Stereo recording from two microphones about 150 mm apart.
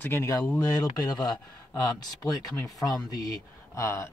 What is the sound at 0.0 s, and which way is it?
Speech, 15° left (ahead or behind).